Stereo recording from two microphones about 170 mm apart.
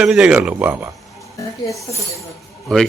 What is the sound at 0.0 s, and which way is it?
Speech, 5° right (ahead or behind).